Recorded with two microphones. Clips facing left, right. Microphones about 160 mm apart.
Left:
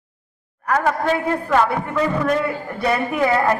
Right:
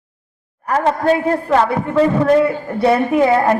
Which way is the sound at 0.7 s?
30° right (ahead or behind).